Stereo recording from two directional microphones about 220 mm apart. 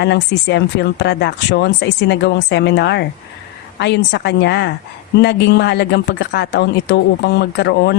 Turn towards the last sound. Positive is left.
turn(degrees=50)  # may be behind; listen again after turning